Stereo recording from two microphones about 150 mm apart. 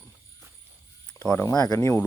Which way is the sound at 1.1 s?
15° left (ahead or behind).